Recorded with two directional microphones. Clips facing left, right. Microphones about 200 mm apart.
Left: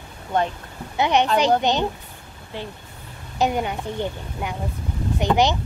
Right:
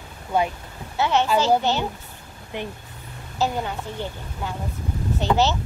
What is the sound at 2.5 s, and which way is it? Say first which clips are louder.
Speech: right 2 dB; 20° right (ahead or behind).